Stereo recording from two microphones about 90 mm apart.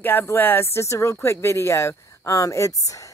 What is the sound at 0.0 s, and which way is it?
Speech, 25° left (ahead or behind).